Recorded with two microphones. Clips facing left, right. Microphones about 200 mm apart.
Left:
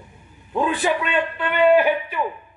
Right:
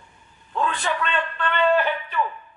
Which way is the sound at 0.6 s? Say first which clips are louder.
Left 4 dB; 10° left (ahead or behind).